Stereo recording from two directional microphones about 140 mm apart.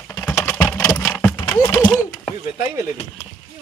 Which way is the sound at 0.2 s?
15° left (ahead or behind).